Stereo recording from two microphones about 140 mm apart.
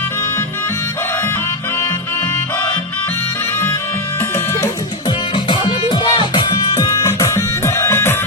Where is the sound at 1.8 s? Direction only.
20° left (ahead or behind).